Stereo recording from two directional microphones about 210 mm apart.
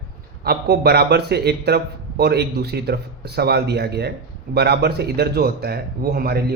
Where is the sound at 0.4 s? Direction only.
50° right (ahead or behind).